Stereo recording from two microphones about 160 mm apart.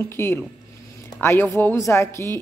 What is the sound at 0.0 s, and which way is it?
A woman's voice, 15° left (ahead or behind).